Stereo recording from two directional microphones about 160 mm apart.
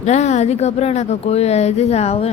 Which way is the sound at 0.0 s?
45° left (ahead or behind).